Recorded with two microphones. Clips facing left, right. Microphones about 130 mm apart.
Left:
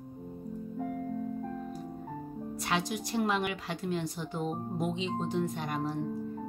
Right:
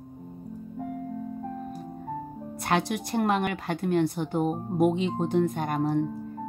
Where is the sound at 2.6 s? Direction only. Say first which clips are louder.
Right 6 dB; 55° right (ahead or behind).